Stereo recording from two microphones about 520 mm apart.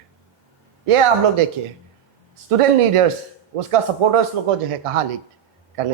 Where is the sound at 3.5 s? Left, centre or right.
Right.